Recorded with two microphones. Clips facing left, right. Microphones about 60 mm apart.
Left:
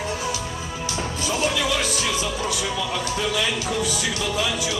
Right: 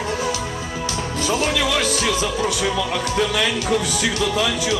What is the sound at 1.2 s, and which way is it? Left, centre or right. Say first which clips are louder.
Speech: right 3 dB; right.